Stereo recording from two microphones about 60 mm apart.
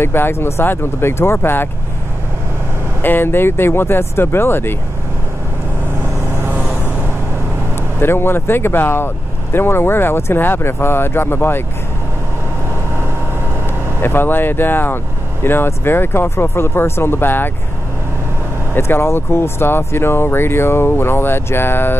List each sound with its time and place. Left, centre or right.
0.0 s speech: left
3.0 s speech: left
8.0 s speech: left
14.0 s speech: left
18.8 s speech: left